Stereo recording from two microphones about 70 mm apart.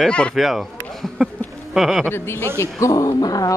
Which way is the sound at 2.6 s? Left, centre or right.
Left.